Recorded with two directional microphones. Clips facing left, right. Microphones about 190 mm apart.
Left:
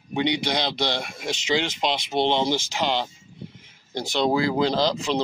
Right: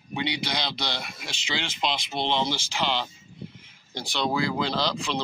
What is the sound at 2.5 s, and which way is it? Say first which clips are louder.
Speech: left 4 dB; 45° left (ahead or behind).